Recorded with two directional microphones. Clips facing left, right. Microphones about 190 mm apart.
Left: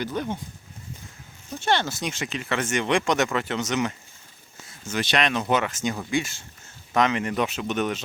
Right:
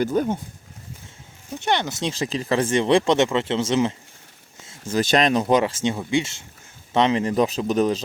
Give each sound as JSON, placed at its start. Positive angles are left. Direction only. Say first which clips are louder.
{"t": 0.0, "sound": "speech", "louder": "right 7 dB", "side_deg": -40}
{"t": 1.5, "sound": "speech", "louder": "right 1 dB", "side_deg": -15}
{"t": 4.9, "sound": "speech", "louder": "right 6 dB", "side_deg": -40}